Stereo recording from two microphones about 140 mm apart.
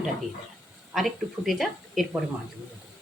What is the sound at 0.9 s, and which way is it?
Speech, centre (ahead or behind).